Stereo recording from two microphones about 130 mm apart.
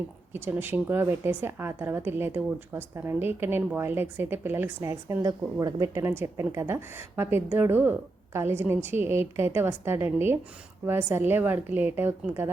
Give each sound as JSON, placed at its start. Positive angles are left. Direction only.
{"t": 0.3, "sound": "a woman's voice", "side_deg": -15}